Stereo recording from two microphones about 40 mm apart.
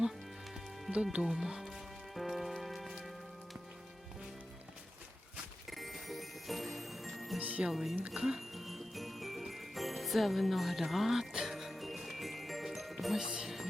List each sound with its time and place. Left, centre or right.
1.2 s music: centre
5.7 s jingle bell: centre
7.3 s jingle bell: right
7.7 s speech: centre
8.5 s jingle bell: centre
13.1 s speech: centre